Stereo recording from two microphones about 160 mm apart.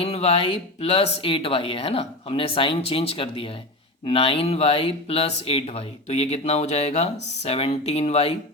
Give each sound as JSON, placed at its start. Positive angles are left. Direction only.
{"t": 0.0, "sound": "speech", "side_deg": 40}